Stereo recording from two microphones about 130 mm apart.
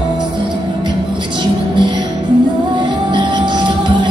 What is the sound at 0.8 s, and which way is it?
Music, 35° right (ahead or behind).